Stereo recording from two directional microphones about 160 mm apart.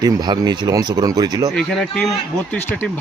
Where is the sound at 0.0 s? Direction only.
25° right (ahead or behind).